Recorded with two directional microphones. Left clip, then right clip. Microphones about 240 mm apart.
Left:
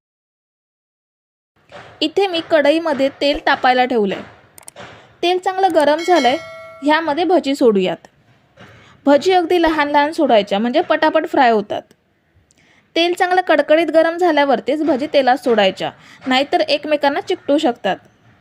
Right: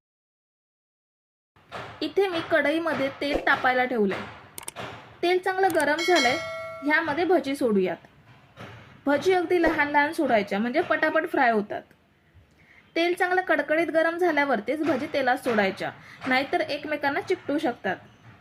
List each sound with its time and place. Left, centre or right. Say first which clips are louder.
2.0 s a woman's voice: left 8 dB; left
5.2 s a woman's voice: left 7 dB; left
6.1 s bell: left 7 dB; centre
6.8 s a woman's voice: left 8 dB; left
9.0 s a woman's voice: left 10 dB; left
12.9 s a woman's voice: left 8 dB; left